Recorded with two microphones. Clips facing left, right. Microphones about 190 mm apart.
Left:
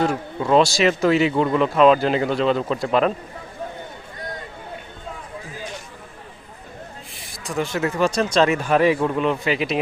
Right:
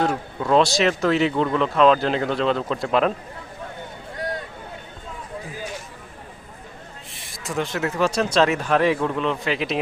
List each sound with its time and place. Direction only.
0.0 s speech: 5° left (ahead or behind)
4.2 s a sound: 75° right (ahead or behind)
7.1 s speech: centre (ahead or behind)